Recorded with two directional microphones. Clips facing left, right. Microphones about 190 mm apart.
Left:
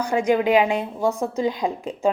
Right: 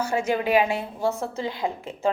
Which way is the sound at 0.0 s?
15° left (ahead or behind).